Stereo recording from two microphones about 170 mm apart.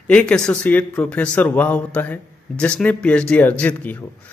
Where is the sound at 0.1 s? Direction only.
5° left (ahead or behind).